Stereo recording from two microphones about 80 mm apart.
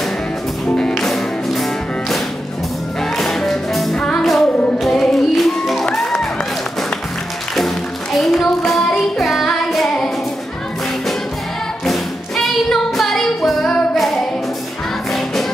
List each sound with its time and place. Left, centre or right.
0.7 s music: centre
7.5 s music: centre
11.8 s music: centre